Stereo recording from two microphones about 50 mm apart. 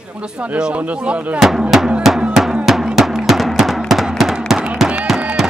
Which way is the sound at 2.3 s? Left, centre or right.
Centre.